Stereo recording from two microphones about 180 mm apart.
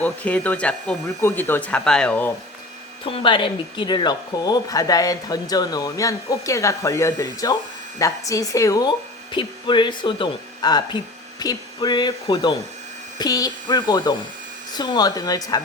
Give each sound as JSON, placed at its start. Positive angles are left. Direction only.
{"t": 0.0, "sound": "speech", "side_deg": 10}
{"t": 3.0, "sound": "speech", "side_deg": 30}